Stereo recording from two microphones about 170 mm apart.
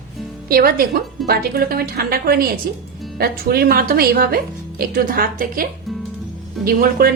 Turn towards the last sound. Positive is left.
turn(degrees=-60)  # may be behind; listen again after turning